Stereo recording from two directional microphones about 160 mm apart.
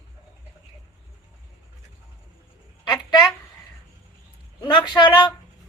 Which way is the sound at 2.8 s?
25° left (ahead or behind).